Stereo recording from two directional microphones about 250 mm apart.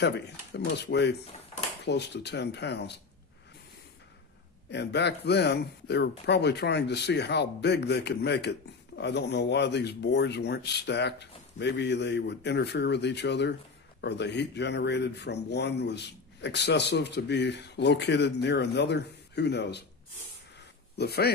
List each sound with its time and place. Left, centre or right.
0.0 s speech: left
4.6 s speech: left
21.0 s speech: left